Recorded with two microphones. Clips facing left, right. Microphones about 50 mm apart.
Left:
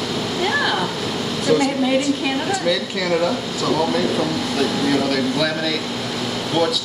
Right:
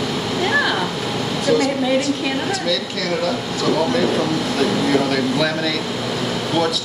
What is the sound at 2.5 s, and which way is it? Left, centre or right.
Speech, centre.